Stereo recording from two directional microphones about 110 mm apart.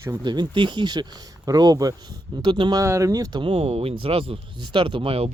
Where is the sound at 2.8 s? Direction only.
30° right (ahead or behind).